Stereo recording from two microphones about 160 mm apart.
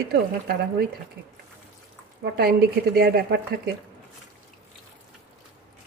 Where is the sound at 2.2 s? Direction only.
75° right (ahead or behind).